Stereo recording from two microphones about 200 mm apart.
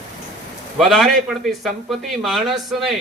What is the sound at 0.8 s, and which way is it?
A man's voice, centre (ahead or behind).